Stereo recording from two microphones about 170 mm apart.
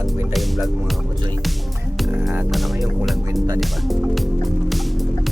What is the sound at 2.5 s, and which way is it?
Music, centre (ahead or behind).